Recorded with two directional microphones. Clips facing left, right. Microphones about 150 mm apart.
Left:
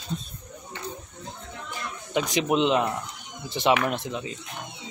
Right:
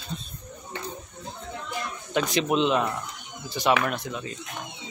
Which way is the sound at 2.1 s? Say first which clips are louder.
Even; 15° left (ahead or behind).